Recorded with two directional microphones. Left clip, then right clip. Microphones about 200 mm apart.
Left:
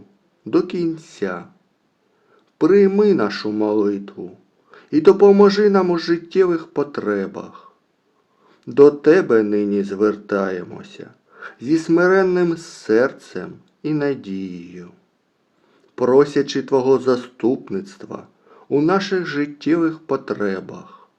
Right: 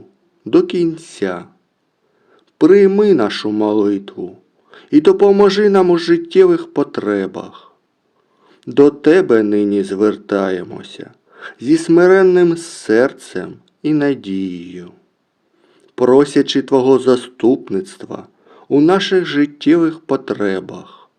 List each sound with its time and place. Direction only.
0.4 s speech: 35° right (ahead or behind)
16.0 s speech: 35° right (ahead or behind)